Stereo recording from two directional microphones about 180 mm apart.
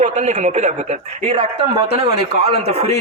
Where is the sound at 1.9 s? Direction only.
65° left (ahead or behind).